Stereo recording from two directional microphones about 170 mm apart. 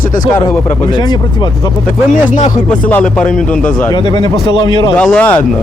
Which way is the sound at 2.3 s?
45° left (ahead or behind).